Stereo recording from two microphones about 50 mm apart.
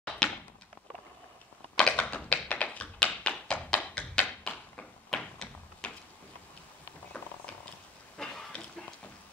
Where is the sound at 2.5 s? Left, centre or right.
Left.